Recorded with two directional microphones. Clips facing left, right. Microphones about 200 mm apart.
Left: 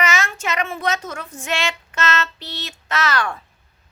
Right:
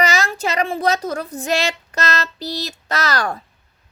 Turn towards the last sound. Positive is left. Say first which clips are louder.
# right 1 dB
turn(degrees=-40)  # may be behind; listen again after turning